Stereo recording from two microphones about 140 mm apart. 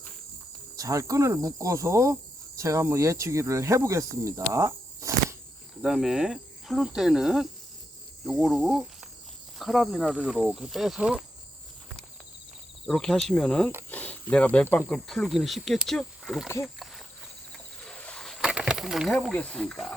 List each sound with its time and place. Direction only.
0.8 s cricket: 25° right (ahead or behind)
2.6 s speech: 20° right (ahead or behind)
5.8 s speech: 5° right (ahead or behind)
12.8 s speech: 5° left (ahead or behind)
17.5 s a sound: 5° left (ahead or behind)
19.3 s speech: 10° left (ahead or behind)